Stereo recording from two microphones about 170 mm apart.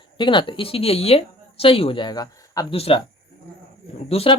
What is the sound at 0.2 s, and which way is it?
Speech, 30° left (ahead or behind).